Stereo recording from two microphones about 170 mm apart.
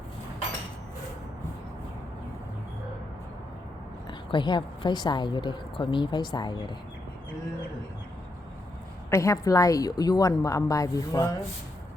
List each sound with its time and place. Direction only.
4.3 s a woman's voice: 25° left (ahead or behind)
9.0 s a woman's voice: 15° left (ahead or behind)